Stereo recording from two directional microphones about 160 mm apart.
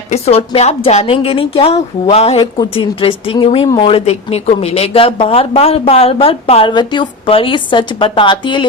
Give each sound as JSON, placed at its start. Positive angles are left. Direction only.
{"t": 0.1, "sound": "speech", "side_deg": 40}